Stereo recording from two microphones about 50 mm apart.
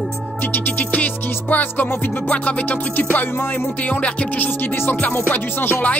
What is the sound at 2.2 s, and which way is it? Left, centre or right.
Music, left.